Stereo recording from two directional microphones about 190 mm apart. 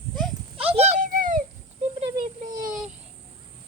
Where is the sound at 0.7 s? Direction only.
35° right (ahead or behind).